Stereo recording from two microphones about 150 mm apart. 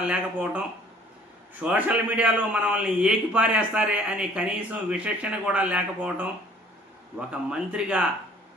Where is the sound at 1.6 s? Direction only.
10° right (ahead or behind).